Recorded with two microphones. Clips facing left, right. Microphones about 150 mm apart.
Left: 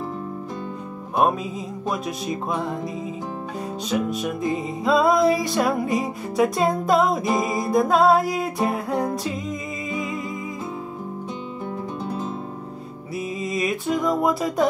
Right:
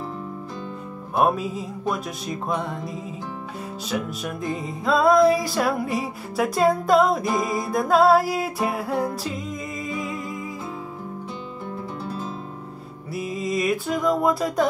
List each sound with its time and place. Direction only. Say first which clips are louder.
1.1 s music: even; 5° right (ahead or behind)
3.9 s music: left 4 dB; centre (ahead or behind)
12.0 s guitar: left 3 dB; 20° left (ahead or behind)
13.1 s music: right 1 dB; centre (ahead or behind)